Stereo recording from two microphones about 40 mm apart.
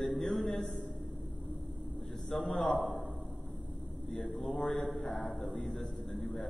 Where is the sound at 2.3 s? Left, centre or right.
Centre.